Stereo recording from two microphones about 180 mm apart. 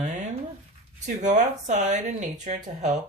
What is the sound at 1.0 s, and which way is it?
Speech, 45° right (ahead or behind).